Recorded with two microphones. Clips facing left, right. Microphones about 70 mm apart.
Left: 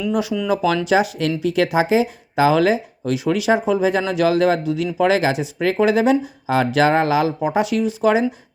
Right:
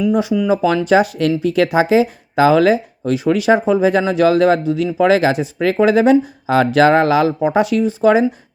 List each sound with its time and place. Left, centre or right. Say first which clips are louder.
0.1 s speech: right 4 dB; right
0.9 s speech: right 4 dB; right